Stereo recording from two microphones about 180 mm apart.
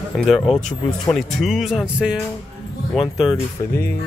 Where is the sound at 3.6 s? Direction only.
25° left (ahead or behind).